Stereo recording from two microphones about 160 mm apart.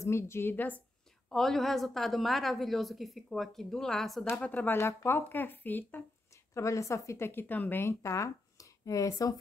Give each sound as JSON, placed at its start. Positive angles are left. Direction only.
{"t": 0.0, "sound": "a woman's voice", "side_deg": 15}